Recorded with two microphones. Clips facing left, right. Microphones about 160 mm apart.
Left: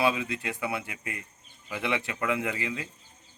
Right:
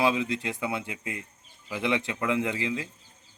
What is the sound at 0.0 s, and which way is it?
Speech, 15° right (ahead or behind).